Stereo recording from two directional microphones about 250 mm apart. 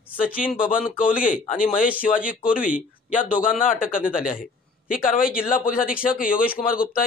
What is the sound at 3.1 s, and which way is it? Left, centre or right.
A man's voice, left.